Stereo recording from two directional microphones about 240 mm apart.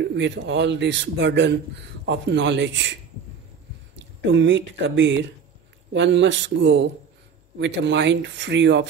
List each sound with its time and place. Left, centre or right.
0.0 s speech: right
4.3 s speech: right